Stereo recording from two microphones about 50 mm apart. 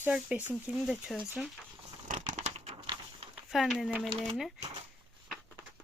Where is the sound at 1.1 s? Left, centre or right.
Centre.